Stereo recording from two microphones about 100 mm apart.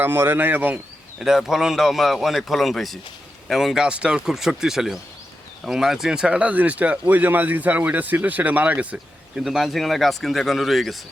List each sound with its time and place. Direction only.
0.0 s speech: 20° right (ahead or behind)
1.2 s speech: 5° right (ahead or behind)